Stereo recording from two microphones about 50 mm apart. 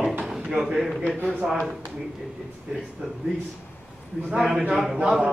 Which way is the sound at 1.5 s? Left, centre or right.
Centre.